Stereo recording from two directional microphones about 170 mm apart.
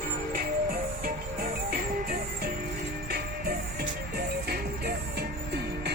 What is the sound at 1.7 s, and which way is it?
Music, 60° right (ahead or behind).